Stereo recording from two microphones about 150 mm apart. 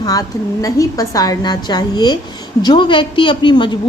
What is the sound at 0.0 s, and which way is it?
A woman's voice, 25° left (ahead or behind).